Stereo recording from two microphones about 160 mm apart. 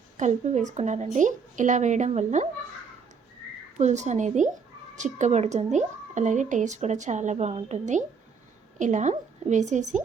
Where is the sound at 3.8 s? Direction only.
45° right (ahead or behind).